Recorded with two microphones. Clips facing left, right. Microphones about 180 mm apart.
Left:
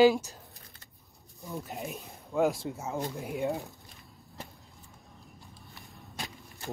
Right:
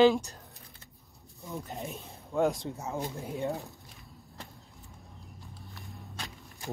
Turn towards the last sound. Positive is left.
turn(degrees=0)  # may be behind; listen again after turning